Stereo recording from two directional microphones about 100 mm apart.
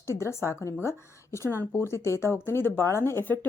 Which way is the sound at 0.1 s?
30° left (ahead or behind).